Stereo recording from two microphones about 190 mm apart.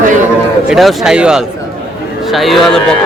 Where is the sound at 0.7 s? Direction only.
Centre (ahead or behind).